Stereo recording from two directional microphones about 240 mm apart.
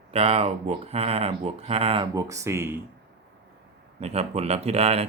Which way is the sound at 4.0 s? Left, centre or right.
Right.